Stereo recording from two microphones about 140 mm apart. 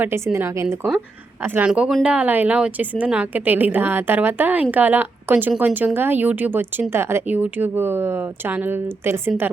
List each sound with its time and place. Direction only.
0.3 s a woman's voice: 15° right (ahead or behind)